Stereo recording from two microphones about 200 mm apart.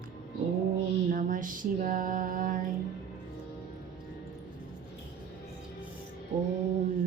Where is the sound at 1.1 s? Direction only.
40° right (ahead or behind).